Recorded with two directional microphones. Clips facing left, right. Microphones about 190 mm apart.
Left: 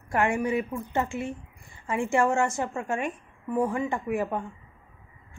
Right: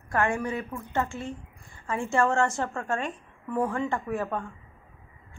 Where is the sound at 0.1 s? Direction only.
20° left (ahead or behind).